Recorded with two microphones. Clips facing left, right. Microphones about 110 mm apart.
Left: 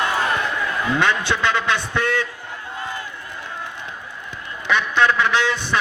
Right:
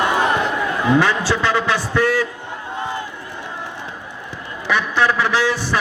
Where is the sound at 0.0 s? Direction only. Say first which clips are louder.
Right 4 dB; 20° right (ahead or behind).